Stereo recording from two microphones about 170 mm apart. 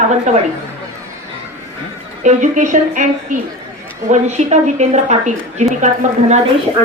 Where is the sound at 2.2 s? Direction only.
45° right (ahead or behind).